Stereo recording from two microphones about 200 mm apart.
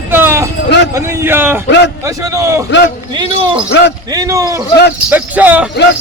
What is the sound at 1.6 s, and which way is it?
Speech, 60° left (ahead or behind).